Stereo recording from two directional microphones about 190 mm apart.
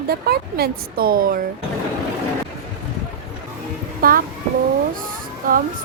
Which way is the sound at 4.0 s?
50° right (ahead or behind).